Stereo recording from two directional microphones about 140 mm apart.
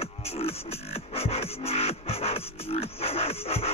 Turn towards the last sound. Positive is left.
turn(degrees=45)  # may be behind; listen again after turning